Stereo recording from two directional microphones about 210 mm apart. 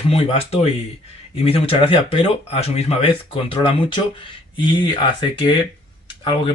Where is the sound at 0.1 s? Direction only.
30° left (ahead or behind).